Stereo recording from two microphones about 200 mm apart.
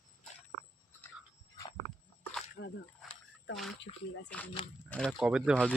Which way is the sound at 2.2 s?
5° left (ahead or behind).